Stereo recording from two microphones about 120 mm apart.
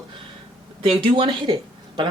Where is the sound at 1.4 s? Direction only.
40° right (ahead or behind).